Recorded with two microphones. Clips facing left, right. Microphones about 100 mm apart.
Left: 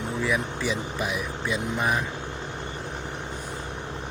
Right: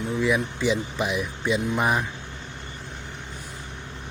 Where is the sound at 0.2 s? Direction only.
20° right (ahead or behind).